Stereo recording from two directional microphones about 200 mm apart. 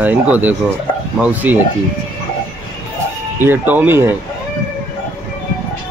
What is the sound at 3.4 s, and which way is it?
Speech, 10° right (ahead or behind).